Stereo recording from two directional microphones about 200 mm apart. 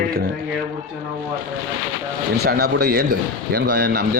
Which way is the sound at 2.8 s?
50° right (ahead or behind).